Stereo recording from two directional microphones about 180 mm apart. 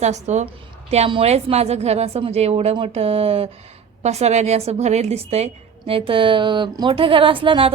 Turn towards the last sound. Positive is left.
turn(degrees=-30)  # may be behind; listen again after turning